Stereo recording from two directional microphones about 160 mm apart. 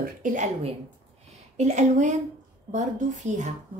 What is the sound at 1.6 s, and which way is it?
A woman's voice, 50° right (ahead or behind).